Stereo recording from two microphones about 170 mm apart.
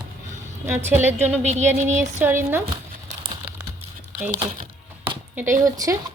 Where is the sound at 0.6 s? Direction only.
15° right (ahead or behind).